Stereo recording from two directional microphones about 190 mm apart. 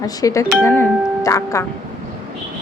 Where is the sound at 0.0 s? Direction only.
20° left (ahead or behind).